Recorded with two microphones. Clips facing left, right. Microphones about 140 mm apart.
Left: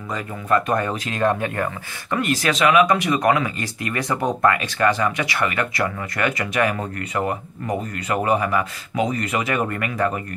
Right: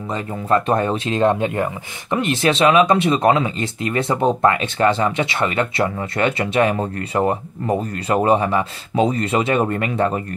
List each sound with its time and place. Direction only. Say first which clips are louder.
0.1 s speech: right 2 dB; 25° right (ahead or behind)